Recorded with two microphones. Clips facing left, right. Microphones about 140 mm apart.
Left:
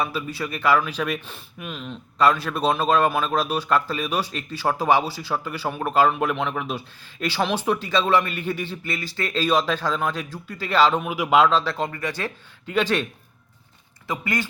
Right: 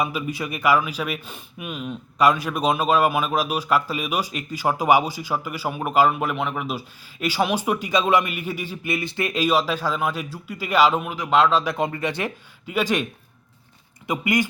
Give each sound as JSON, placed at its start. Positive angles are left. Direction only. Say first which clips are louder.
{"t": 0.0, "sound": "speech", "louder": "right 1 dB", "side_deg": -15}
{"t": 11.0, "sound": "speech", "louder": "left 1 dB", "side_deg": 5}
{"t": 11.5, "sound": "speech", "louder": "right 1 dB", "side_deg": -15}
{"t": 12.6, "sound": "speech", "louder": "even", "side_deg": -10}
{"t": 14.1, "sound": "speech", "louder": "right 4 dB", "side_deg": -15}